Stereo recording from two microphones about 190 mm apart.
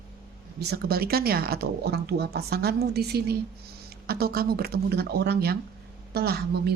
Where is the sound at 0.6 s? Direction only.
55° right (ahead or behind).